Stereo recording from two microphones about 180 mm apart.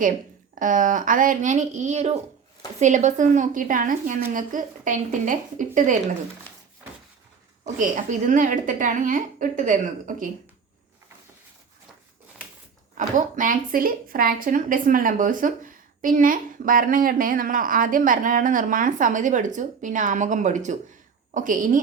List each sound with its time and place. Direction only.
0.6 s a woman's voice: 45° right (ahead or behind)
7.6 s a woman's voice: 45° right (ahead or behind)
13.0 s a woman's voice: 45° right (ahead or behind)